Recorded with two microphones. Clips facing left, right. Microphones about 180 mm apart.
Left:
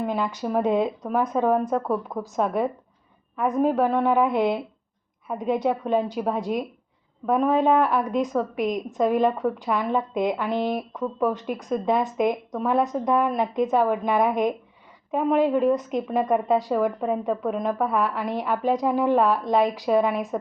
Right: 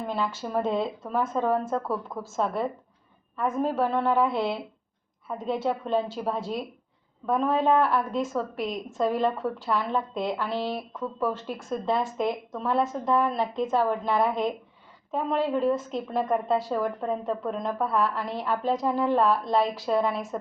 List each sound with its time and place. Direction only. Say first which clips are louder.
0.0 s speech: left 4 dB; 15° left (ahead or behind)